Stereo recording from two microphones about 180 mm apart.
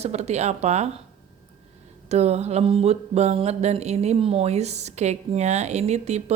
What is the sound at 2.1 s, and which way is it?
Mantra, 35° right (ahead or behind).